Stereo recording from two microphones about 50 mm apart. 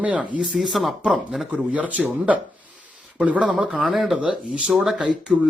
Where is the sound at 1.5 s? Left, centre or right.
Right.